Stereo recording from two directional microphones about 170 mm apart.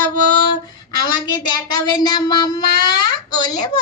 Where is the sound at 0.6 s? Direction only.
25° left (ahead or behind).